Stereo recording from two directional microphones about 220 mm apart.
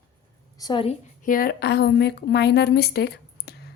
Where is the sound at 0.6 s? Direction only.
20° left (ahead or behind).